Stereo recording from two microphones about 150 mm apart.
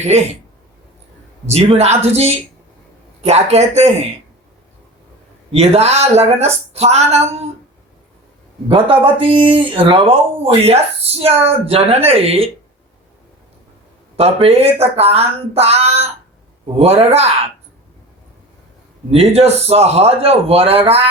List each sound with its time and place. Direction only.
1.5 s speech: 45° right (ahead or behind)
5.5 s speech: 45° right (ahead or behind)
8.7 s speech: 35° right (ahead or behind)
14.2 s speech: 40° right (ahead or behind)
19.1 s speech: 45° right (ahead or behind)